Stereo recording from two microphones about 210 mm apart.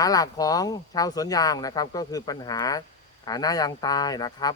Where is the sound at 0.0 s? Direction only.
15° left (ahead or behind).